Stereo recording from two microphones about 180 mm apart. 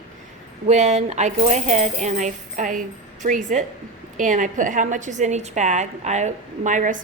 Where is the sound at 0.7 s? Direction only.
40° right (ahead or behind).